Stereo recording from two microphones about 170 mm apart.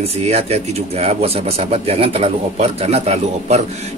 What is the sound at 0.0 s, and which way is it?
Speech, 40° right (ahead or behind).